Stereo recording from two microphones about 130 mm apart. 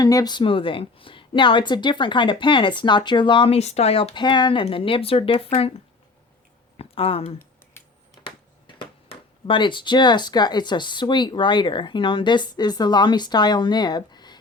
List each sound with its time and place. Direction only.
0.0 s speech: 30° left (ahead or behind); by 4.1 s 50° left (ahead or behind)
4.1 s speech: 35° left (ahead or behind)
6.7 s a sound: 45° left (ahead or behind)
8.6 s speech: 40° left (ahead or behind)